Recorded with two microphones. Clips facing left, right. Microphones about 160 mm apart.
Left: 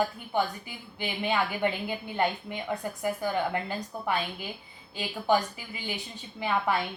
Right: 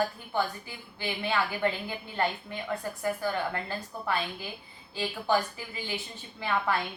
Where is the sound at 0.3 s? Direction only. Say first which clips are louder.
Left 2 dB; 15° left (ahead or behind).